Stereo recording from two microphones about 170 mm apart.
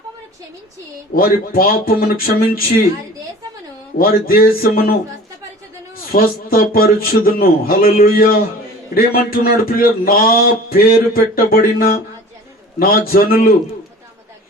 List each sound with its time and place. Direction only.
1.1 s a man's voice: 60° left (ahead or behind)
3.9 s a man's voice: 60° left (ahead or behind)
6.1 s a man's voice: 60° left (ahead or behind)